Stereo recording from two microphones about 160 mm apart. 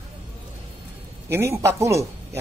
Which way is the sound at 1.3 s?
15° right (ahead or behind).